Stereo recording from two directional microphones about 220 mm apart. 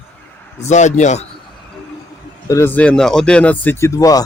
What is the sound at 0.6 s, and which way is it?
Speech, 30° left (ahead or behind).